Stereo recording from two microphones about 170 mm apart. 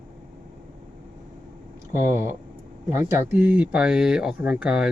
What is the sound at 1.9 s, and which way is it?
Speech, 15° right (ahead or behind).